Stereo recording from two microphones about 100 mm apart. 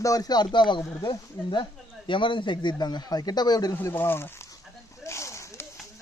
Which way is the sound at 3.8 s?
20° left (ahead or behind).